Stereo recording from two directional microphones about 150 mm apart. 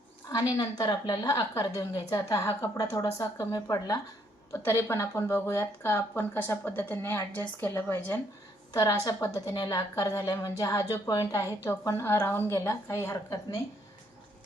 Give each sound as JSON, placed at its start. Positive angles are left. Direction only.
{"t": 0.5, "sound": "a woman's voice", "side_deg": 25}